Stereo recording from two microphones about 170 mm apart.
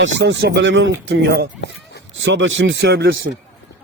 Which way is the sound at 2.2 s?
90° right.